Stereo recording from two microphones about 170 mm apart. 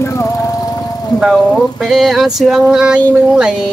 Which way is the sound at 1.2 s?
Centre (ahead or behind).